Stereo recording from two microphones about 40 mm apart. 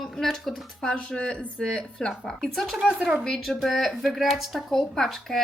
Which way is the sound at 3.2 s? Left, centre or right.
Centre.